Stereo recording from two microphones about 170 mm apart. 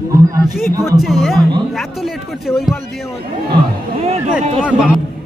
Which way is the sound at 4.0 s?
40° right (ahead or behind).